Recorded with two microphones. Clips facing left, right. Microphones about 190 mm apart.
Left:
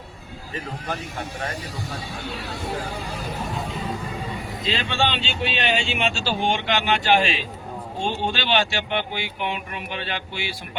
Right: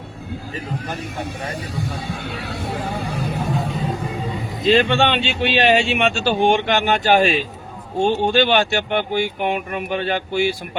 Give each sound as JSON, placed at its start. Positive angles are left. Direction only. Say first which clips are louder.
{"t": 2.2, "sound": "speech", "louder": "right 3 dB", "side_deg": -60}
{"t": 4.7, "sound": "speech", "louder": "right 9 dB", "side_deg": -55}